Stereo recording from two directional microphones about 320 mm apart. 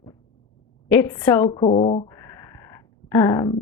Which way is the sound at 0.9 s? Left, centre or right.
Centre.